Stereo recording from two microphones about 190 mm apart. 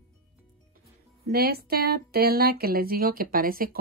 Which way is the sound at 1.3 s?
55° right (ahead or behind).